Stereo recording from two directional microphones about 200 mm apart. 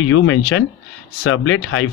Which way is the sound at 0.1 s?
90° left.